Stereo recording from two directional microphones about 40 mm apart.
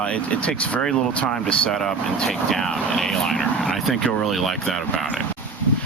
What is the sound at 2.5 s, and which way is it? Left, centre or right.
Speech, centre.